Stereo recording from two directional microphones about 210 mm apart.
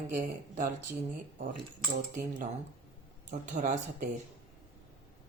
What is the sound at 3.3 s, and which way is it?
Speech, 40° right (ahead or behind).